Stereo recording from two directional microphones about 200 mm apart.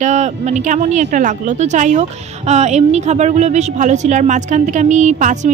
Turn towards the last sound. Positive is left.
turn(degrees=-35)  # may be behind; listen again after turning